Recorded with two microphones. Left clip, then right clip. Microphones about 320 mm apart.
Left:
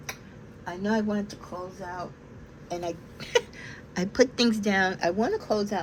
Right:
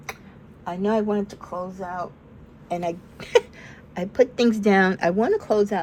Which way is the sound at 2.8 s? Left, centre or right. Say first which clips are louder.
Right 5 dB; centre.